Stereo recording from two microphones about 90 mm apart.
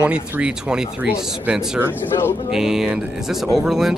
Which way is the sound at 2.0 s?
25° left (ahead or behind).